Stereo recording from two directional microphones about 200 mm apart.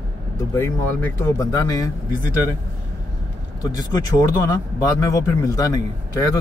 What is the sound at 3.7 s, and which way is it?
Speech, 20° left (ahead or behind).